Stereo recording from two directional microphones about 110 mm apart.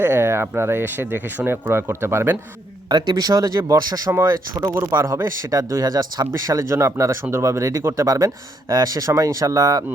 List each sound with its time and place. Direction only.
0.0 s speech: 20° right (ahead or behind)
2.9 s speech: 40° right (ahead or behind)
4.2 s speech: 45° right (ahead or behind)
5.5 s speech: 30° right (ahead or behind)